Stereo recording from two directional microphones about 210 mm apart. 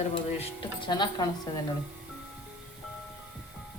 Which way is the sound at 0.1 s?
25° left (ahead or behind).